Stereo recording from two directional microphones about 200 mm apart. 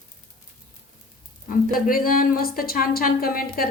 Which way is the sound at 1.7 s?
45° left (ahead or behind).